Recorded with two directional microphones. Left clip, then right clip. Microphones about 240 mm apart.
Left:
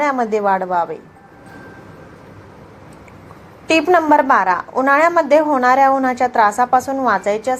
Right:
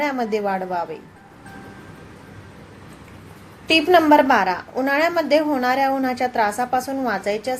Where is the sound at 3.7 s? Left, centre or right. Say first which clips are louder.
Left 2 dB; centre.